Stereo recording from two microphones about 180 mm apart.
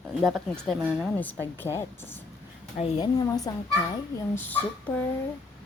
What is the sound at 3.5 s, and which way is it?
Speech, 20° left (ahead or behind).